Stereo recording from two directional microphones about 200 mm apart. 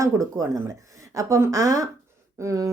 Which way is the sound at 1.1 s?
15° right (ahead or behind).